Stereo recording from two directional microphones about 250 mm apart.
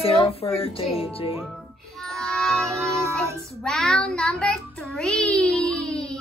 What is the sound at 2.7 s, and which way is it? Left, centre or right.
Music, centre.